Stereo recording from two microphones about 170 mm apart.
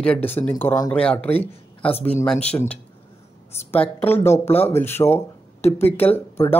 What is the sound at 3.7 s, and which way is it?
Speech, 10° left (ahead or behind).